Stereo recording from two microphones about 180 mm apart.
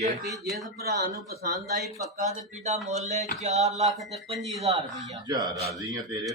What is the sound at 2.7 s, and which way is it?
Speech, centre (ahead or behind).